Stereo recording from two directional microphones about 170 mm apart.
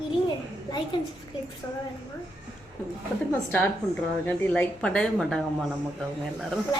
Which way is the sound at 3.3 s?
10° left (ahead or behind).